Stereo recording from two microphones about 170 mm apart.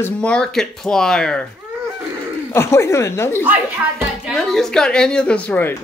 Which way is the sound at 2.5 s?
15° left (ahead or behind).